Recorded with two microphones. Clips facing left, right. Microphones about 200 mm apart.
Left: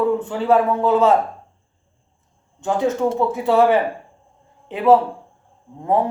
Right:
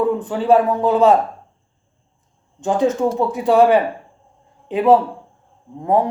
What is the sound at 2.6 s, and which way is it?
Speech, 20° right (ahead or behind).